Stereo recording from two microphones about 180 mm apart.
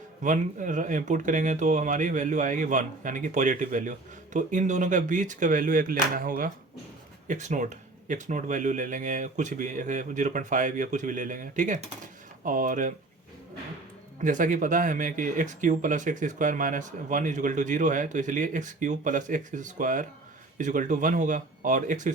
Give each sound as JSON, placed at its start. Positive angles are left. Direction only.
{"t": 0.2, "sound": "speech", "side_deg": -45}
{"t": 7.3, "sound": "speech", "side_deg": -40}
{"t": 14.2, "sound": "speech", "side_deg": -45}